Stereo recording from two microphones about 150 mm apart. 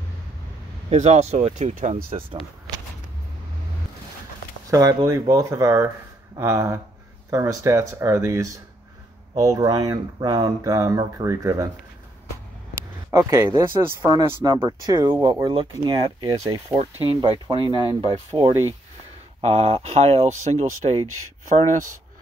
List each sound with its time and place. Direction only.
0.8 s speech: 45° right (ahead or behind)
4.6 s speech: 20° right (ahead or behind)
13.1 s speech: 20° right (ahead or behind)
17.0 s speech: 35° right (ahead or behind)